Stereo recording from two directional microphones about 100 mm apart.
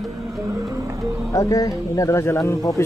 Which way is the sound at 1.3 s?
35° left (ahead or behind).